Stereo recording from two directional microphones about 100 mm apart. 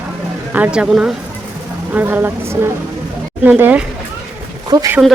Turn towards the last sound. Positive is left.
turn(degrees=-45)  # may be behind; listen again after turning